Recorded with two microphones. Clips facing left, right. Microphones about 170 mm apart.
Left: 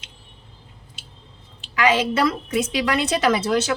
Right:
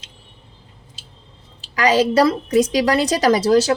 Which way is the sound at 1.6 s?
40° right (ahead or behind).